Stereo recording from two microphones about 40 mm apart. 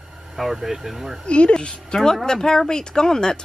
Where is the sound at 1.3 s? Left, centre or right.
Left.